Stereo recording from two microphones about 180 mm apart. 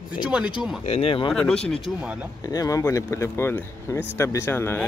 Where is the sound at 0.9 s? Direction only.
30° left (ahead or behind).